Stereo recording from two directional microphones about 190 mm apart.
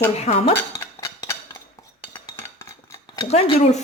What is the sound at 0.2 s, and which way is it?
Speech, 35° left (ahead or behind).